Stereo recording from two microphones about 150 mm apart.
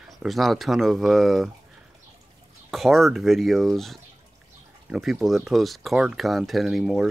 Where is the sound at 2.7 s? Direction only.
Centre (ahead or behind).